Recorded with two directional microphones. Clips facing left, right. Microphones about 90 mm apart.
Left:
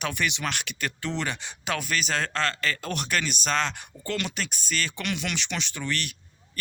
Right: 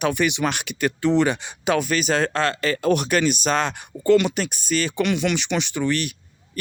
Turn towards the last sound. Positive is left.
turn(degrees=-10)  # may be behind; listen again after turning